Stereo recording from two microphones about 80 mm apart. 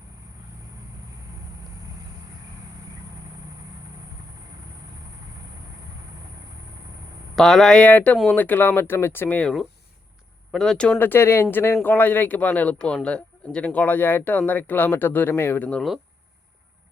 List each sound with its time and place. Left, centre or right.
7.3 s speech: centre; by 9.4 s left
10.5 s speech: centre
10.9 s speech: left